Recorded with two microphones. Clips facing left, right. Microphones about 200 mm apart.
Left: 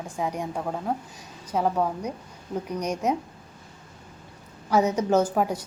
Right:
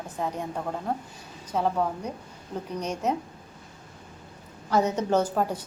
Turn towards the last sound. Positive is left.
turn(degrees=10)  # may be behind; listen again after turning